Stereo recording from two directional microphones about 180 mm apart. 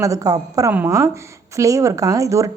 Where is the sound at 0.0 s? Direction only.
20° right (ahead or behind).